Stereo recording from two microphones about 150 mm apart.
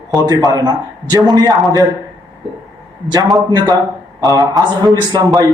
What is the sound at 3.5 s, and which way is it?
A man's voice, 30° right (ahead or behind).